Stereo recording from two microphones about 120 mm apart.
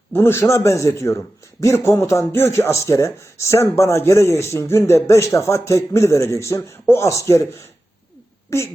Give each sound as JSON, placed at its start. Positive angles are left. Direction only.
{"t": 0.1, "sound": "speech", "side_deg": 20}
{"t": 8.4, "sound": "speech", "side_deg": 25}